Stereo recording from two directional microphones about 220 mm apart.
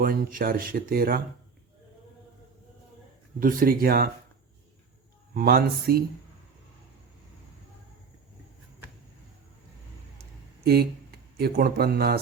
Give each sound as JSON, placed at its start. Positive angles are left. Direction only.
{"t": 0.0, "sound": "speech", "side_deg": -40}
{"t": 3.4, "sound": "speech", "side_deg": -40}
{"t": 5.3, "sound": "speech", "side_deg": -45}
{"t": 10.6, "sound": "speech", "side_deg": -45}